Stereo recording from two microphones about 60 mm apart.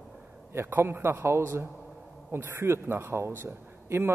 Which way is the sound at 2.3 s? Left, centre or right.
Right.